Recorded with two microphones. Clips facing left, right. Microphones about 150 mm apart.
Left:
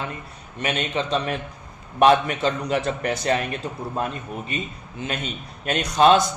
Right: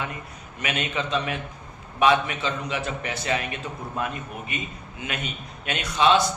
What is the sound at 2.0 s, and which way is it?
A man's voice, 45° left (ahead or behind).